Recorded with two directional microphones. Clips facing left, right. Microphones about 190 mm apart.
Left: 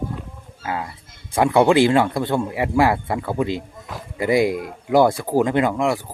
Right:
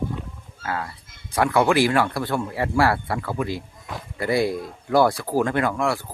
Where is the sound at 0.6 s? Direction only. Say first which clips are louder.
Left 2 dB; 20° left (ahead or behind).